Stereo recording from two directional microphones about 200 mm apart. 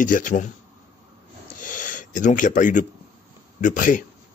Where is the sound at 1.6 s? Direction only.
40° left (ahead or behind).